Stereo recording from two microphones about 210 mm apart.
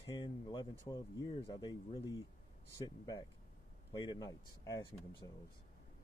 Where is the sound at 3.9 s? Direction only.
20° left (ahead or behind).